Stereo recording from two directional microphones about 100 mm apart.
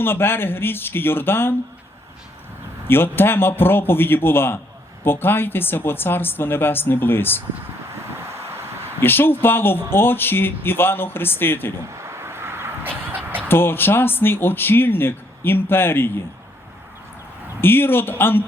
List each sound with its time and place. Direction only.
0.0 s speech: 20° left (ahead or behind)
2.8 s speech: 20° left (ahead or behind)
9.0 s speech: 20° left (ahead or behind)
11.9 s a sound: 25° right (ahead or behind)
13.5 s speech: 20° left (ahead or behind)
17.6 s speech: 20° left (ahead or behind)